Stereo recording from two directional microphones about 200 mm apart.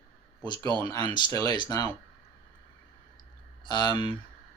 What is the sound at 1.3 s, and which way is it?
Speech, 20° left (ahead or behind).